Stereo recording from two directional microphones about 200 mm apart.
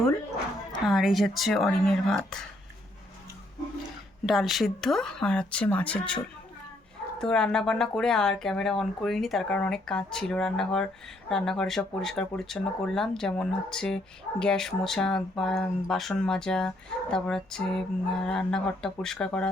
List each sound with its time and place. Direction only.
0.9 s speech: centre (ahead or behind)
4.3 s speech: centre (ahead or behind)
7.2 s speech: 5° left (ahead or behind)